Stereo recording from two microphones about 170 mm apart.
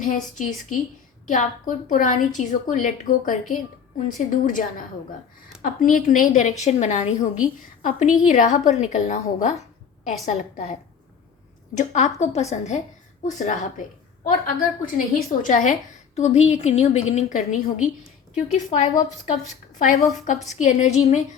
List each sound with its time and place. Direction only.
0.3 s a woman's voice: 50° left (ahead or behind)
20.2 s a woman's voice: 45° left (ahead or behind)